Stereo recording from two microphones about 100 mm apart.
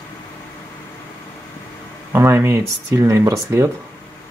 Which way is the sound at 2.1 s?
25° right (ahead or behind).